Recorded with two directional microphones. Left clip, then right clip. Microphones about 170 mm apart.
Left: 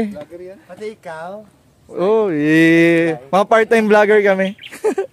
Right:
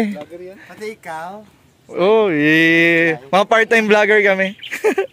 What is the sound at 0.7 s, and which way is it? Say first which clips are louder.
Speech: right 1 dB; 55° left (ahead or behind).